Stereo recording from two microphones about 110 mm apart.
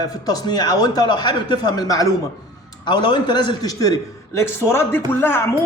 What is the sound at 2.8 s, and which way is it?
A man's voice, 40° left (ahead or behind).